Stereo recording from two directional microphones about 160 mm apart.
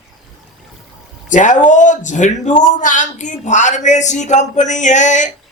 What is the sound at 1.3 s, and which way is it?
A man's voice, 50° left (ahead or behind).